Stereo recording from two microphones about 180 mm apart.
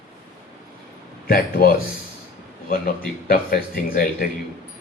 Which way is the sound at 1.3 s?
55° left (ahead or behind).